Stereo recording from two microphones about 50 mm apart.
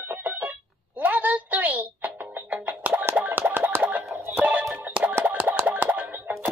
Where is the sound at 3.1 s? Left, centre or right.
Right.